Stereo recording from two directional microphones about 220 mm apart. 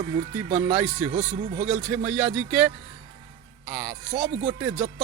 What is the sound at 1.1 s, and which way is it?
Speech, 30° right (ahead or behind).